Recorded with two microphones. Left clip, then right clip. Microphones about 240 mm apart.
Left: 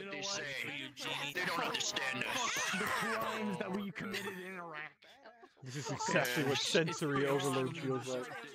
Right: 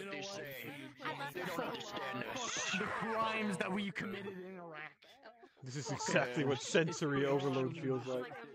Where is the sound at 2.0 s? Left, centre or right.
Left.